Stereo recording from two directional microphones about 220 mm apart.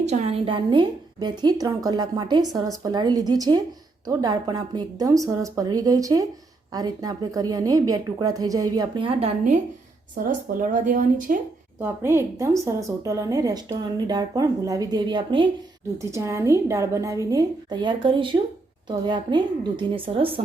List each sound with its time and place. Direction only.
0.0 s a woman's voice: 30° right (ahead or behind)
10.2 s speech: 35° right (ahead or behind)
11.8 s a woman's voice: 10° right (ahead or behind)